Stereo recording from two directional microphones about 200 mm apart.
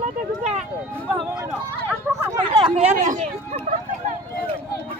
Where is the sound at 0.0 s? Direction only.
30° right (ahead or behind).